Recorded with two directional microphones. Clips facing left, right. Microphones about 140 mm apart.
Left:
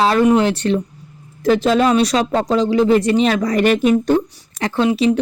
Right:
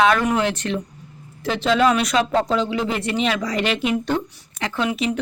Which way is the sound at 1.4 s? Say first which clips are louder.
Left 4 dB; 45° left (ahead or behind).